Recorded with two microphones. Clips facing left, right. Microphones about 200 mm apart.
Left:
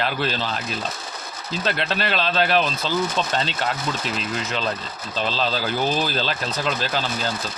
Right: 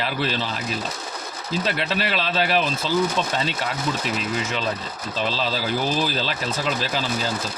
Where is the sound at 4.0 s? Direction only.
5° right (ahead or behind).